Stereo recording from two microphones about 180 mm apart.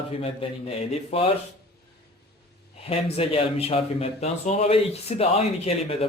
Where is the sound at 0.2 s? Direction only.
35° left (ahead or behind).